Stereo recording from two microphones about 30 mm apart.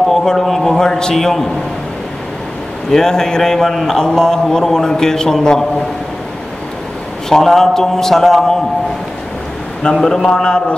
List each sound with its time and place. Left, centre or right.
0.1 s a man's voice: centre
1.1 s a man's voice: centre
2.9 s a man's voice: centre
7.2 s a man's voice: centre
9.9 s a man's voice: centre
10.3 s a man's voice: left